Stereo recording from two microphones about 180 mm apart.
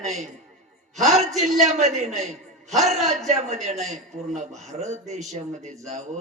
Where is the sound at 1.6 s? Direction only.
40° right (ahead or behind).